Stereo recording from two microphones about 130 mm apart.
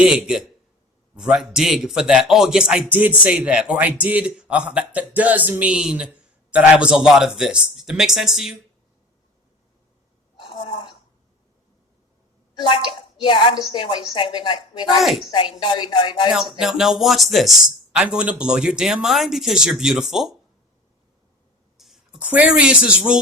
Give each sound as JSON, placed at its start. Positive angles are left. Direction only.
{"t": 0.0, "sound": "speech", "side_deg": -10}
{"t": 10.3, "sound": "a sound", "side_deg": 40}
{"t": 12.5, "sound": "a woman's voice", "side_deg": 40}
{"t": 15.0, "sound": "speech", "side_deg": 0}
{"t": 15.3, "sound": "a woman's voice", "side_deg": 40}
{"t": 16.3, "sound": "speech", "side_deg": -5}
{"t": 21.8, "sound": "speech", "side_deg": 0}